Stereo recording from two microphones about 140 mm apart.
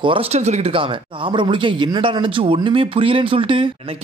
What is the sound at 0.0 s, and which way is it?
Speech, 45° right (ahead or behind).